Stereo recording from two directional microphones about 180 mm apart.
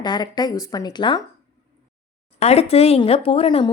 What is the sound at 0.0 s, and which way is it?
A woman's voice, 25° left (ahead or behind).